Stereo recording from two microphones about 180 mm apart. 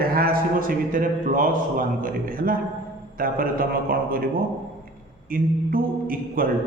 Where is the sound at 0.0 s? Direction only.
55° right (ahead or behind).